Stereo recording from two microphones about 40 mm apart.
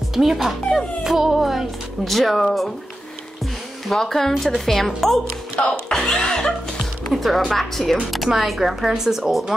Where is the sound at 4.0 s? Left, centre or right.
Centre.